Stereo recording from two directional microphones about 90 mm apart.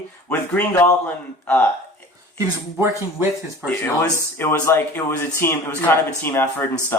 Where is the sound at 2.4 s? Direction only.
25° right (ahead or behind).